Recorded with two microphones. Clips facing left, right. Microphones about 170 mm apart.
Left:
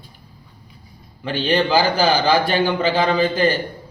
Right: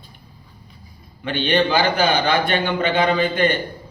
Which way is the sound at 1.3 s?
35° left (ahead or behind).